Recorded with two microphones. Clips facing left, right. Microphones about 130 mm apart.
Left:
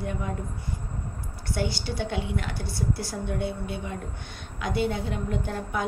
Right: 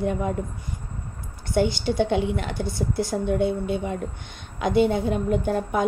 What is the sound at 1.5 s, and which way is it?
A woman's voice, 20° right (ahead or behind).